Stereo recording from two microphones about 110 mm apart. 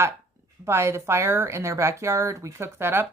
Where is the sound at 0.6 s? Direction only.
25° right (ahead or behind).